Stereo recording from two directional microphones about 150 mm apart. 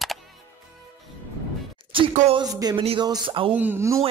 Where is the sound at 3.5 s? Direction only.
10° right (ahead or behind).